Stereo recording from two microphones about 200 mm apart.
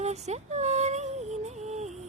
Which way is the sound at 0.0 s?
35° right (ahead or behind).